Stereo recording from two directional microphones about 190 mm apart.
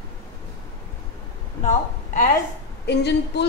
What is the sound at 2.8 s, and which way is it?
Speech, 60° left (ahead or behind).